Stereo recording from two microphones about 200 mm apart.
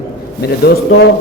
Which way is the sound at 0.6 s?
55° left (ahead or behind).